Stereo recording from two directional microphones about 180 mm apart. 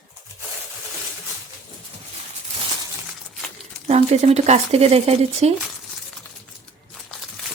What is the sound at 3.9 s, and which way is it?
Speech, 35° right (ahead or behind).